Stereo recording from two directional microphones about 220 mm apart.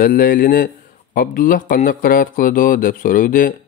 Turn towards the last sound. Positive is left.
turn(degrees=40)  # may be behind; listen again after turning